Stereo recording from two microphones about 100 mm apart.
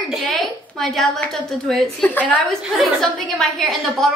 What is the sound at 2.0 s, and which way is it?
Speech, 15° left (ahead or behind).